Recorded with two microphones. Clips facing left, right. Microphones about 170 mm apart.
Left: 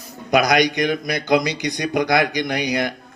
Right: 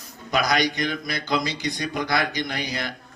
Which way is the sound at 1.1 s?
50° left (ahead or behind).